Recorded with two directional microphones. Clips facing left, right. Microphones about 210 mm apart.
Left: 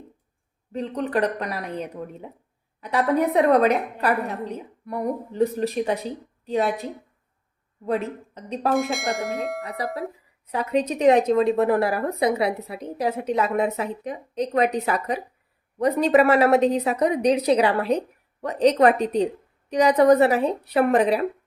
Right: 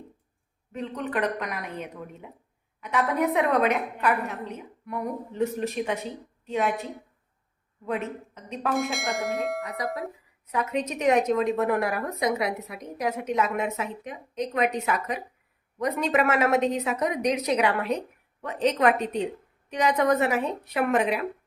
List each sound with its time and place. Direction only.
0.7 s a woman's voice: 35° left (ahead or behind)
7.9 s a woman's voice: 35° left (ahead or behind)
8.7 s speech: centre (ahead or behind)
10.5 s a woman's voice: 35° left (ahead or behind)